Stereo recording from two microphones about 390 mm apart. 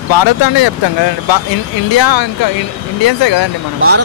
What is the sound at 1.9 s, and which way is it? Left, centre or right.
Speech, left.